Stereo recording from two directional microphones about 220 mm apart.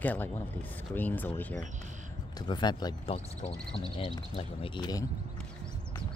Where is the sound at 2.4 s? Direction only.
20° left (ahead or behind).